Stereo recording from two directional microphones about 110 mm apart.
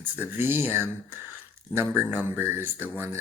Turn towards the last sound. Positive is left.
turn(degrees=-20)  # may be behind; listen again after turning